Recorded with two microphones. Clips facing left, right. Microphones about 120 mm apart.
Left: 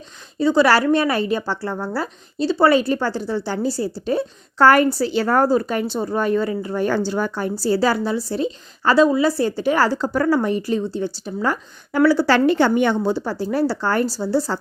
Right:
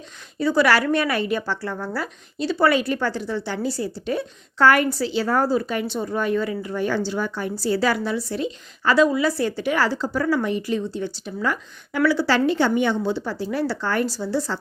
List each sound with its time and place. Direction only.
0.3 s a woman's voice: 25° left (ahead or behind)
5.1 s speech: 55° left (ahead or behind)
7.6 s a woman's voice: 35° left (ahead or behind)
12.3 s a woman's voice: 60° left (ahead or behind)
13.0 s a woman's voice: 40° left (ahead or behind)